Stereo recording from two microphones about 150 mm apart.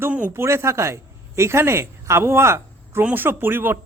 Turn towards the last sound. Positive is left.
turn(degrees=-15)  # may be behind; listen again after turning